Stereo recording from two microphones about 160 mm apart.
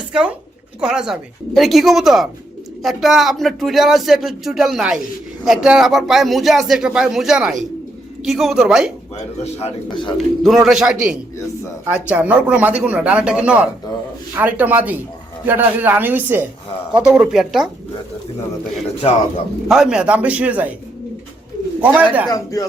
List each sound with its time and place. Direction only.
0.1 s speech: 5° right (ahead or behind)
9.4 s speech: 40° left (ahead or behind)
10.2 s speech: centre (ahead or behind)
19.6 s speech: 5° right (ahead or behind)
21.8 s speech: 10° right (ahead or behind)